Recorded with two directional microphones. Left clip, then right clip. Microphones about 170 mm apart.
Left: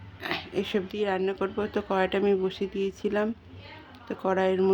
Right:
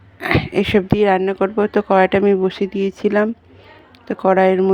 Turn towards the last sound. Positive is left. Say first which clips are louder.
# right 11 dB
turn(degrees=-40)  # may be behind; listen again after turning